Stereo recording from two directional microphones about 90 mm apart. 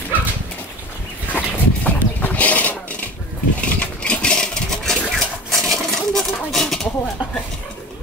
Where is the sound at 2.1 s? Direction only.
20° left (ahead or behind).